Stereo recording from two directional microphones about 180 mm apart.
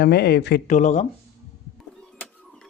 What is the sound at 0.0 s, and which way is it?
Speech, 65° left (ahead or behind).